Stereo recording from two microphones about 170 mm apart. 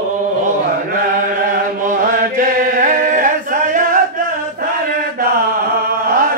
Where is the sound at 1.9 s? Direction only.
50° right (ahead or behind).